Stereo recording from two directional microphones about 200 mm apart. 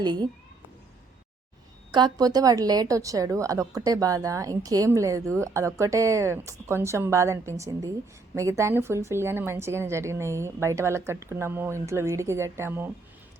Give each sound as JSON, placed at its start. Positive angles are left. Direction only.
{"t": 0.0, "sound": "a child's voice", "side_deg": -20}
{"t": 1.9, "sound": "a woman's voice", "side_deg": -20}